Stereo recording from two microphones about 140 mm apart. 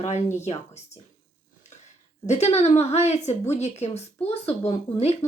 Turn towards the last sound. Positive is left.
turn(degrees=50)  # may be behind; listen again after turning